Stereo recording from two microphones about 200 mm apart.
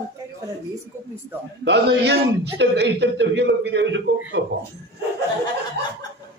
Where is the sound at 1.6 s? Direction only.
60° right (ahead or behind).